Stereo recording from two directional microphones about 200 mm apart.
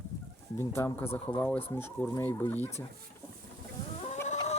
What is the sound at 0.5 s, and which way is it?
Speech, 15° left (ahead or behind).